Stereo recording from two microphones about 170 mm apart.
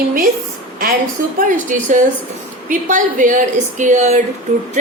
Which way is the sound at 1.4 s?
50° right (ahead or behind).